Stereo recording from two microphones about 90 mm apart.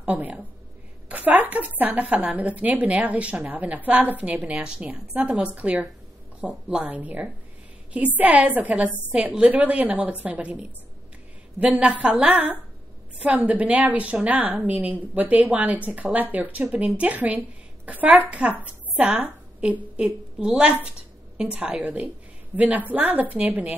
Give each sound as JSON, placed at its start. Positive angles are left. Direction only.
{"t": 0.0, "sound": "a woman's voice", "side_deg": -15}
{"t": 11.6, "sound": "a woman's voice", "side_deg": -15}